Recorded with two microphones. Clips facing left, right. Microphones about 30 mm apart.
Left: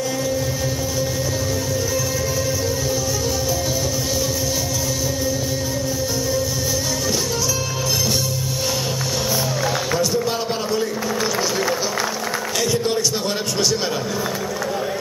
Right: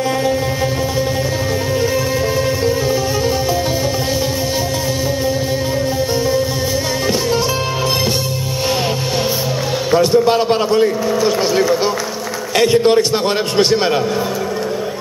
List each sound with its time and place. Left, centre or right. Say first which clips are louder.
9.9 s a man's voice: right 9 dB; right
12.5 s a man's voice: right 11 dB; right